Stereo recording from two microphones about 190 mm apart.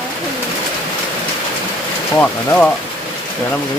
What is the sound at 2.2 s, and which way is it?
Speech, 5° left (ahead or behind).